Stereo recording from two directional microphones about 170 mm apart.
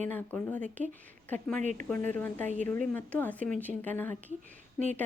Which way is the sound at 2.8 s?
10° left (ahead or behind).